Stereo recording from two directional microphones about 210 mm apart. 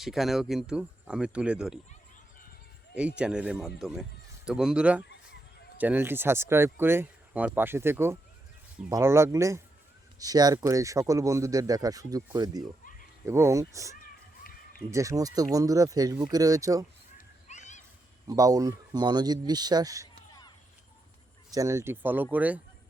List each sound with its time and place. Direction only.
0.0 s speech: centre (ahead or behind)
2.9 s speech: 5° right (ahead or behind)
17.2 s a sound: 35° left (ahead or behind)
18.3 s speech: 15° right (ahead or behind)
21.5 s speech: 15° right (ahead or behind)